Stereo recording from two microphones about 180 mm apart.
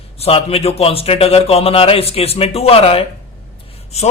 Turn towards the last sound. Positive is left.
turn(degrees=35)  # may be behind; listen again after turning